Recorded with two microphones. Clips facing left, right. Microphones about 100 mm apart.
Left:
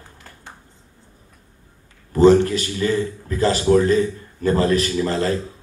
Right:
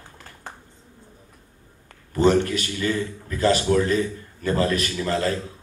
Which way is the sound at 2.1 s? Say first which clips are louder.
Left 6 dB; 35° left (ahead or behind).